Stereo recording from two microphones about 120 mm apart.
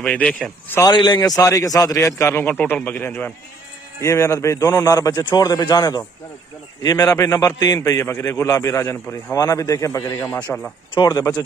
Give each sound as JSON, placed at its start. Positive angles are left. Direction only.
{"t": 0.0, "sound": "a man's voice", "side_deg": 10}
{"t": 0.9, "sound": "a man's voice", "side_deg": 35}
{"t": 2.4, "sound": "a man's voice", "side_deg": 15}
{"t": 4.0, "sound": "a man's voice", "side_deg": 25}
{"t": 10.5, "sound": "a man's voice", "side_deg": 10}
{"t": 11.0, "sound": "a man's voice", "side_deg": 35}